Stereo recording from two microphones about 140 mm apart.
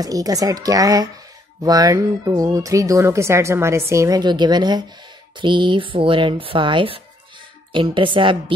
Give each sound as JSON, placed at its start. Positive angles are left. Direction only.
{"t": 0.0, "sound": "speech", "side_deg": -25}
{"t": 4.2, "sound": "speech", "side_deg": -30}